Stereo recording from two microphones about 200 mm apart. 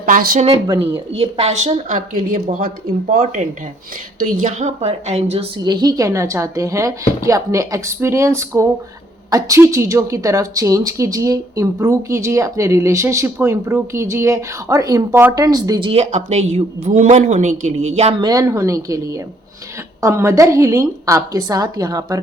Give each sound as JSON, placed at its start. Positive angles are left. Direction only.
{"t": 0.0, "sound": "speech", "side_deg": -45}
{"t": 0.5, "sound": "a woman's voice", "side_deg": -20}
{"t": 18.2, "sound": "a woman's voice", "side_deg": -20}